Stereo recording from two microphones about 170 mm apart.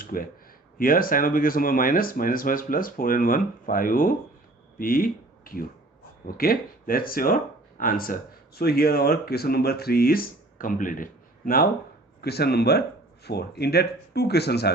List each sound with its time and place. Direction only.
0.0 s speech: 55° left (ahead or behind)
12.2 s speech: 70° left (ahead or behind)